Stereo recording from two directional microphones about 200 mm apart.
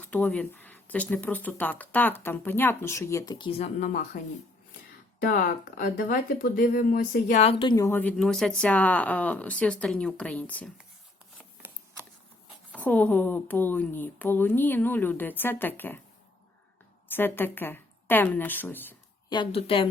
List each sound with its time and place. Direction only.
0.0 s speech: 5° left (ahead or behind); by 4.2 s 40° left (ahead or behind)
5.2 s speech: 45° left (ahead or behind); by 10.7 s 5° left (ahead or behind)
11.3 s shuffling cards: 10° right (ahead or behind)
12.7 s speech: 5° left (ahead or behind)
17.1 s a woman's voice: 10° left (ahead or behind)
19.3 s a woman's voice: 25° left (ahead or behind)